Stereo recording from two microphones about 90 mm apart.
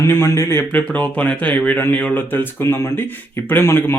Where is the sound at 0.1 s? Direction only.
25° left (ahead or behind).